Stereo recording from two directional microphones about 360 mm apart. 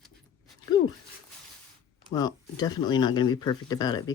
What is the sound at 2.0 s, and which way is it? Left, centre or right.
Speech, centre.